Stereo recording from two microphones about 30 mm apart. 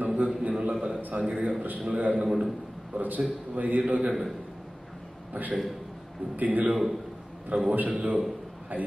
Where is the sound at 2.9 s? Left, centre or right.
Right.